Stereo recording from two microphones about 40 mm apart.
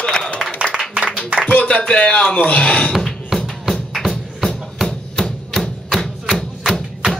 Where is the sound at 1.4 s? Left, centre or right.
Left.